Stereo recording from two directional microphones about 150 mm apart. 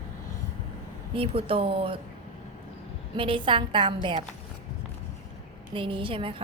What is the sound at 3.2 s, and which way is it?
A woman's voice, 35° right (ahead or behind).